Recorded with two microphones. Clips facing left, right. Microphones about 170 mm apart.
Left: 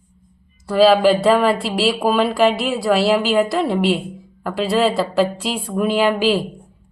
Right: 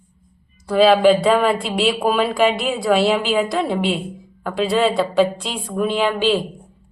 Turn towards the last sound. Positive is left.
turn(degrees=5)  # may be behind; listen again after turning